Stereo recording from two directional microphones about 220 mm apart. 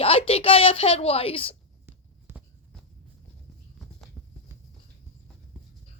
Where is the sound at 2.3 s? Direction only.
10° right (ahead or behind).